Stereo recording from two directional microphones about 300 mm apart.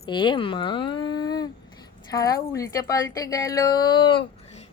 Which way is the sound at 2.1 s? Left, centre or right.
Centre.